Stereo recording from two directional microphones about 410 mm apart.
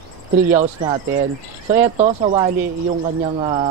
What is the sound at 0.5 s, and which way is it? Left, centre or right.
Speech, centre.